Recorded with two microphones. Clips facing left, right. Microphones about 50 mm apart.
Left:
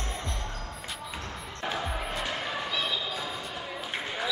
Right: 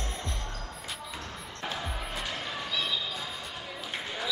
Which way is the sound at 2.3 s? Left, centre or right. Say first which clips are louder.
Left 3 dB; centre.